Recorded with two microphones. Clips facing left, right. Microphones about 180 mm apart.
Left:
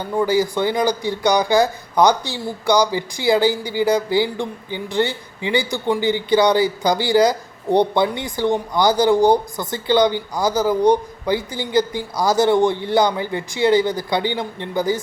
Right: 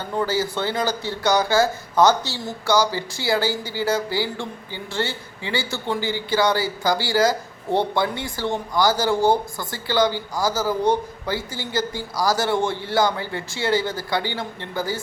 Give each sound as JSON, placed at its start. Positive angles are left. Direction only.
{"t": 0.2, "sound": "speech", "side_deg": 15}